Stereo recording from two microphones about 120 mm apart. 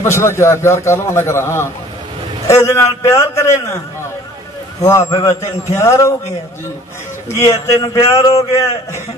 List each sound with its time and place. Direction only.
0.0 s a man's voice: 20° left (ahead or behind)
4.8 s a man's voice: 25° left (ahead or behind)
7.6 s a man's voice: 30° left (ahead or behind)